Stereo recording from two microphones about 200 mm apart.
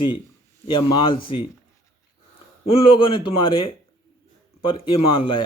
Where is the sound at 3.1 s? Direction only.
25° left (ahead or behind).